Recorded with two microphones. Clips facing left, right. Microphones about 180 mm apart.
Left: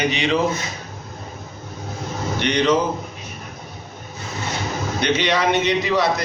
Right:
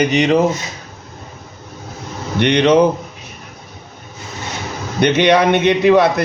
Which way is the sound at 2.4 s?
65° right (ahead or behind).